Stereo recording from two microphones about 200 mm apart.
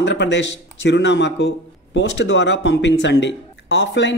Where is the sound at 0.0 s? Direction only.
65° left (ahead or behind).